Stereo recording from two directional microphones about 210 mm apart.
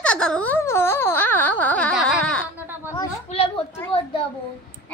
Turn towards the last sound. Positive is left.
turn(degrees=25)  # may be behind; listen again after turning